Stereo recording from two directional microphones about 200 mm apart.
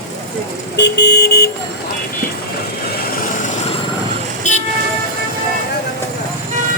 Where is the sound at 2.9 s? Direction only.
50° left (ahead or behind).